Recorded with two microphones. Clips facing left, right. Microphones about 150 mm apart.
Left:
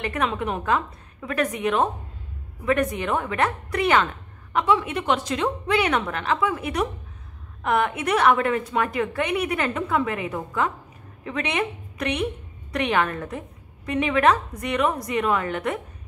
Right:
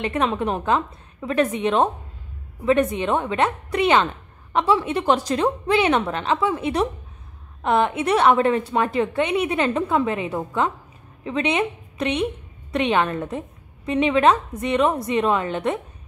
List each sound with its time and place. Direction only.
0.0 s a woman's voice: 25° right (ahead or behind)